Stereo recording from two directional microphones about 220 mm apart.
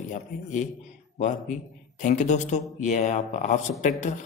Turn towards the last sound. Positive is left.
turn(degrees=35)  # may be behind; listen again after turning